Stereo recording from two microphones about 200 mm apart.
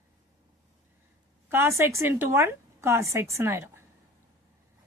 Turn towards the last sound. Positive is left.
turn(degrees=-15)  # may be behind; listen again after turning